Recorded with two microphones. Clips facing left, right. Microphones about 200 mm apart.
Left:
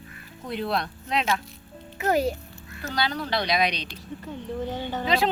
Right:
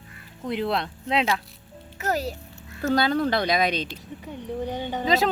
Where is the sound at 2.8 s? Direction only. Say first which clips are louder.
Right 7 dB; 50° right (ahead or behind).